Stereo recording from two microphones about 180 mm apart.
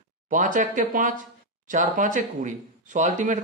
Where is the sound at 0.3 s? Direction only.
45° right (ahead or behind).